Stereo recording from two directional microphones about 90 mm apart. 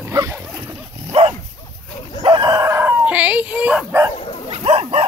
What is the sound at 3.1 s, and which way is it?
Dog, 15° right (ahead or behind).